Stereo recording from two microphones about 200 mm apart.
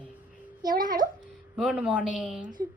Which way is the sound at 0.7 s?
45° right (ahead or behind).